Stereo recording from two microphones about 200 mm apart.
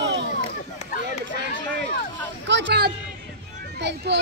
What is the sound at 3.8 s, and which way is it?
Children playing, 60° right (ahead or behind).